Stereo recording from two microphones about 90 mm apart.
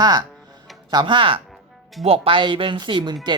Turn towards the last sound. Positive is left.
turn(degrees=-60)  # may be behind; listen again after turning